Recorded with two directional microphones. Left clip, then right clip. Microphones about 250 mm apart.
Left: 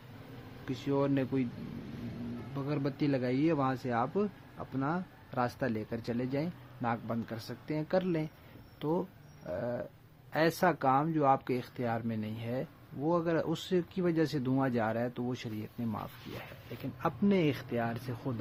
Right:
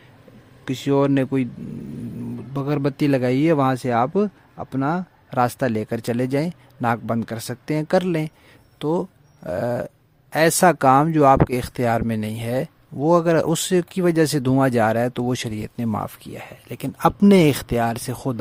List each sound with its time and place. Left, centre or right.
0.6 s speech: right
2.6 s speech: right